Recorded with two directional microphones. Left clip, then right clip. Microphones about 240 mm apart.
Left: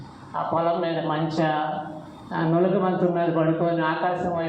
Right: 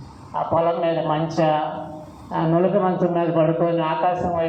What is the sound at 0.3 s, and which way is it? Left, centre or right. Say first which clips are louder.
A man's voice: right 3 dB; right.